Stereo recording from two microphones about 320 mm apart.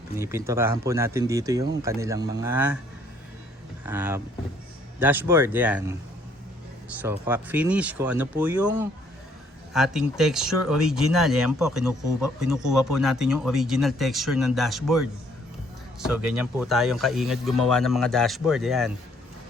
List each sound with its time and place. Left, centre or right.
0.2 s speech: centre
3.8 s speech: centre
7.0 s speech: centre